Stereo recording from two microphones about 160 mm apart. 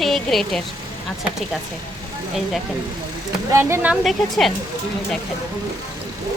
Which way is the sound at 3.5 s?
15° right (ahead or behind).